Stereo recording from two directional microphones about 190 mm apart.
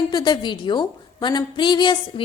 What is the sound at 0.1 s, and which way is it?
A woman's voice, 25° left (ahead or behind).